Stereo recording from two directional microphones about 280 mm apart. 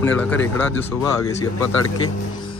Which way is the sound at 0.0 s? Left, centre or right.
Centre.